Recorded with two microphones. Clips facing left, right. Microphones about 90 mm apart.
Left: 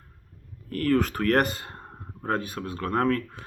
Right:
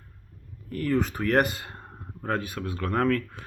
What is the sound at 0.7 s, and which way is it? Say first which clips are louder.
Speech: left 2 dB; 55° left (ahead or behind).